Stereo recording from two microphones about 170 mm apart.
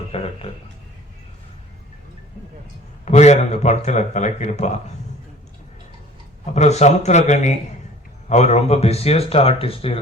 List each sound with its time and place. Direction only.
0.1 s a sound: 35° left (ahead or behind)
3.0 s speech: 40° left (ahead or behind)
6.4 s speech: 40° left (ahead or behind)